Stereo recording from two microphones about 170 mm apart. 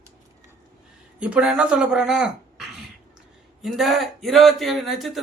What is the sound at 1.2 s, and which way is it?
Speech, 5° right (ahead or behind).